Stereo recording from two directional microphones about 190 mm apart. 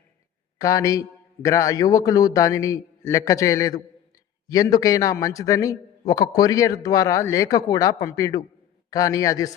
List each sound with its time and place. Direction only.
0.6 s a man's voice: 20° left (ahead or behind)